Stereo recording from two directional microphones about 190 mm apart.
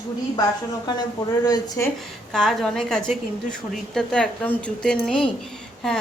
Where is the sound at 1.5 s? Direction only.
20° left (ahead or behind).